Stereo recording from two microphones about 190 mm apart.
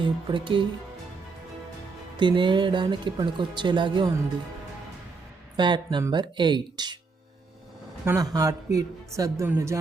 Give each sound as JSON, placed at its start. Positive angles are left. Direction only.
{"t": 0.0, "sound": "speech", "side_deg": -25}
{"t": 2.1, "sound": "speech", "side_deg": -25}
{"t": 5.5, "sound": "speech", "side_deg": -25}
{"t": 8.0, "sound": "speech", "side_deg": -15}